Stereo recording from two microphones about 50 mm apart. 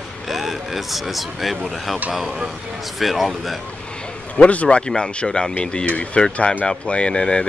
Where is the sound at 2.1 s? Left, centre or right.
Centre.